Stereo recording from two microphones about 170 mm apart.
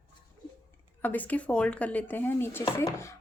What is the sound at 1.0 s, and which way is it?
Speech, 10° left (ahead or behind).